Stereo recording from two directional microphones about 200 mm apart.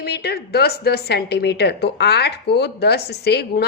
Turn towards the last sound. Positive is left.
turn(degrees=55)  # may be behind; listen again after turning